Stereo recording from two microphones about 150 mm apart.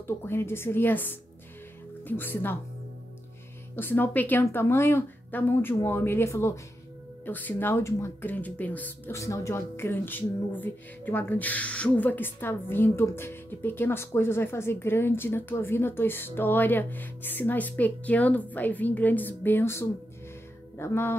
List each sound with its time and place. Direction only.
0.0 s speech: 15° left (ahead or behind)
3.7 s speech: 15° left (ahead or behind)